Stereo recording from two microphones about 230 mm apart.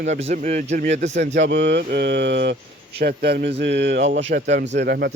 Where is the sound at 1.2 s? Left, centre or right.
Right.